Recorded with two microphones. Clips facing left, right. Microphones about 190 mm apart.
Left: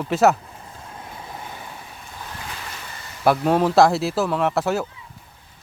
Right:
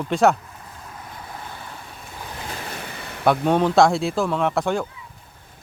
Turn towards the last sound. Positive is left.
turn(degrees=5)  # may be behind; listen again after turning